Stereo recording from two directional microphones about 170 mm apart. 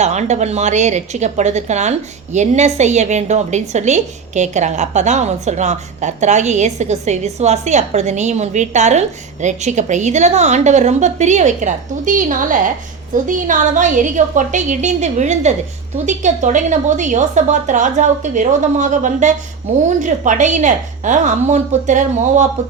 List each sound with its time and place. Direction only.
0.0 s a woman's voice: 45° right (ahead or behind)